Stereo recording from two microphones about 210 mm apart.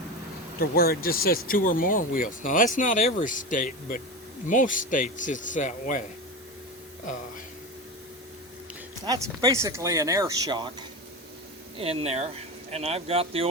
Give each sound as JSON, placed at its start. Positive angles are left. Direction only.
{"t": 0.6, "sound": "speech", "side_deg": 45}
{"t": 9.0, "sound": "speech", "side_deg": -15}